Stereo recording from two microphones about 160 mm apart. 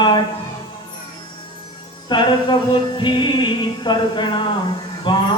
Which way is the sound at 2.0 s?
30° left (ahead or behind).